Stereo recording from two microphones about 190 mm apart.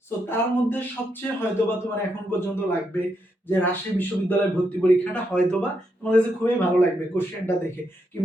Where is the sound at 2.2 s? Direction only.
10° left (ahead or behind).